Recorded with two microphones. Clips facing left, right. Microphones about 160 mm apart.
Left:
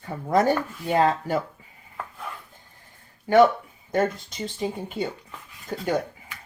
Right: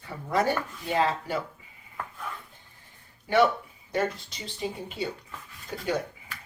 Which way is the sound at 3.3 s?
45° left (ahead or behind).